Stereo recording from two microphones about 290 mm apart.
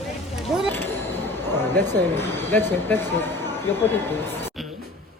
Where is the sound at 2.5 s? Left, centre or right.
Centre.